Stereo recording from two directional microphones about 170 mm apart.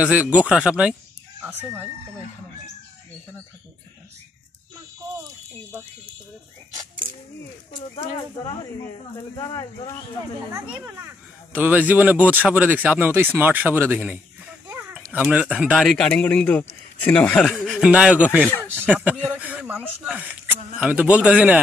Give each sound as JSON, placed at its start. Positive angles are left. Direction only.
{"t": 0.0, "sound": "speech", "side_deg": -10}
{"t": 9.4, "sound": "speech", "side_deg": 20}
{"t": 11.5, "sound": "a man's voice", "side_deg": -10}